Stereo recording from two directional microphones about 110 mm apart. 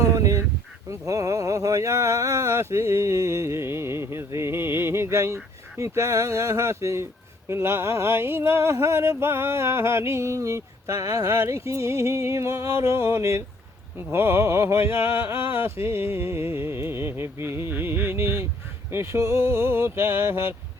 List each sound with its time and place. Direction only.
0.0 s goose: 30° right (ahead or behind)
0.9 s speech: 30° right (ahead or behind)